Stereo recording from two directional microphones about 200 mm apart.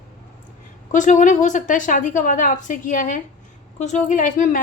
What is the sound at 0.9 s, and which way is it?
A woman's voice, 40° left (ahead or behind).